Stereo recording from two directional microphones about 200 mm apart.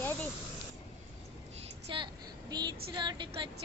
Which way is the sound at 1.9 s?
25° right (ahead or behind).